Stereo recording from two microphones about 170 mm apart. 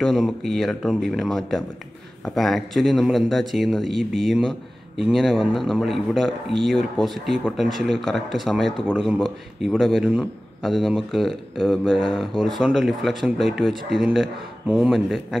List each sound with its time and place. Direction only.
0.0 s a man's voice: centre (ahead or behind)